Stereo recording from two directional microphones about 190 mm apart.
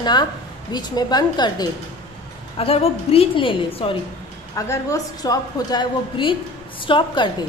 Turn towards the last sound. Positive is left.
turn(degrees=25)  # may be behind; listen again after turning